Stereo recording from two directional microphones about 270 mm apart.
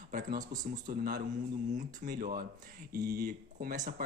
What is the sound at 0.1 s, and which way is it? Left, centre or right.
Speech, right.